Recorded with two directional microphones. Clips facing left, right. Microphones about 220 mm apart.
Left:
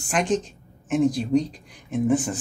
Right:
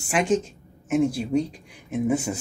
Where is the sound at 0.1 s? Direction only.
5° right (ahead or behind).